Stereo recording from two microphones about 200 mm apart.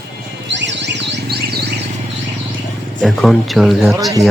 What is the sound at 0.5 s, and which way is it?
Music, 60° right (ahead or behind).